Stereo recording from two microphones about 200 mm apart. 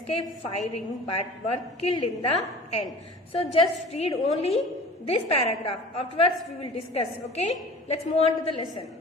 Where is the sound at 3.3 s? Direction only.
30° left (ahead or behind).